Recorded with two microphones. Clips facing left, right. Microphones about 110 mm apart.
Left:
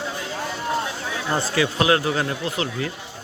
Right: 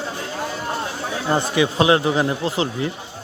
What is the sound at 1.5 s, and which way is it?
Speech, 20° right (ahead or behind).